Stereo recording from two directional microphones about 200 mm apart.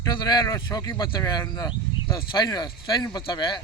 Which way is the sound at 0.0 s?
20° left (ahead or behind).